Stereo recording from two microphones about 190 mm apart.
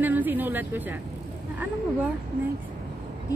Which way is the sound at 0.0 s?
10° right (ahead or behind).